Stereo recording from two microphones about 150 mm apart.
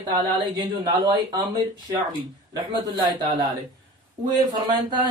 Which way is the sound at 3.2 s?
25° right (ahead or behind).